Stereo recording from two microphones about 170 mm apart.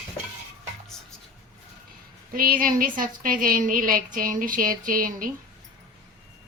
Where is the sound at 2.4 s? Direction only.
55° right (ahead or behind).